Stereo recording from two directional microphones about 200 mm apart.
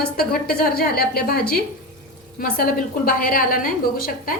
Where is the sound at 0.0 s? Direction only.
50° left (ahead or behind).